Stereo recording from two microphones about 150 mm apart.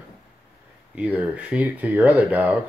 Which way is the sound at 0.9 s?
10° right (ahead or behind).